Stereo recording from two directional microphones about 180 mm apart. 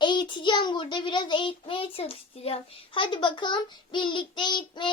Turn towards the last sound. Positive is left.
turn(degrees=25)  # may be behind; listen again after turning